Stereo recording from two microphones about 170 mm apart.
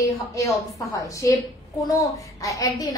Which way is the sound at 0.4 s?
20° left (ahead or behind).